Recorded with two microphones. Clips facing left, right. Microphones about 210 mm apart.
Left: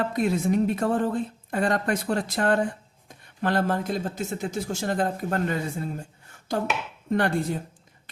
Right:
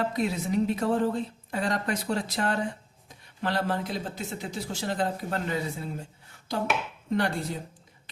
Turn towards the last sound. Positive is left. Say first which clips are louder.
# left 4 dB
turn(degrees=50)  # may be behind; listen again after turning